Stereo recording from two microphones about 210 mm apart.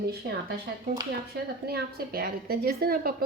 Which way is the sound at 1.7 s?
45° right (ahead or behind).